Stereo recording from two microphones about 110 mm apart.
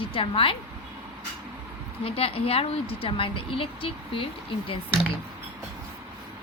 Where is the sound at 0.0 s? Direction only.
55° left (ahead or behind).